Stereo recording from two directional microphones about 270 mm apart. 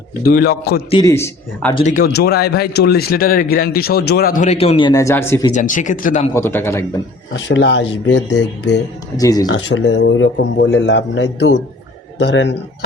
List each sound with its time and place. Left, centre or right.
0.3 s speech: left
0.9 s speech: centre
1.8 s speech: left; by 5.5 s centre
5.5 s speech: left
6.3 s speech: centre
7.3 s speech: left
9.1 s speech: centre
9.5 s speech: left